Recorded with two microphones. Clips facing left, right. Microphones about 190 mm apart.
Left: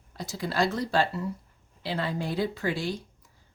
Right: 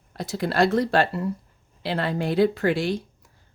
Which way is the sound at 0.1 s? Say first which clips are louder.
Right 6 dB; 65° right (ahead or behind).